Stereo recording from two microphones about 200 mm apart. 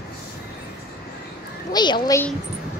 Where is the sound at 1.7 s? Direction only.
20° left (ahead or behind).